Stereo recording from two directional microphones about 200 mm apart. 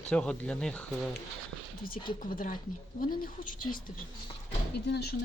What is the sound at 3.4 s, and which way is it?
Speech, 40° left (ahead or behind).